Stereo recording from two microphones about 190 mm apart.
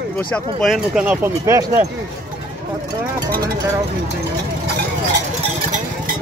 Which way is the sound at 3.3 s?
50° right (ahead or behind).